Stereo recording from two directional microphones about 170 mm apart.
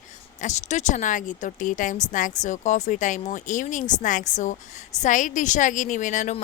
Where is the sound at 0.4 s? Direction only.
45° left (ahead or behind).